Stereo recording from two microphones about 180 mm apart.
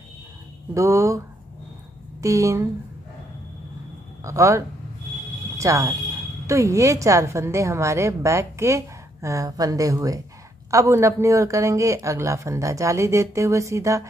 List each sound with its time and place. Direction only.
0.7 s a woman's voice: 15° right (ahead or behind)
4.2 s a woman's voice: 15° right (ahead or behind)